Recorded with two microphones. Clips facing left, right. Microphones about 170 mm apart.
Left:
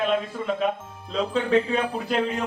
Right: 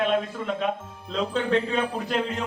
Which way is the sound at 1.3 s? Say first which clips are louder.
Left 3 dB; 5° left (ahead or behind).